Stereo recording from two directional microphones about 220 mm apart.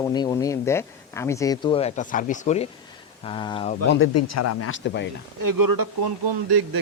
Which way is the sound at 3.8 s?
65° left (ahead or behind).